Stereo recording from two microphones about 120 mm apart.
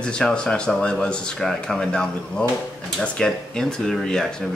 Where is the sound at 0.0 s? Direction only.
5° left (ahead or behind).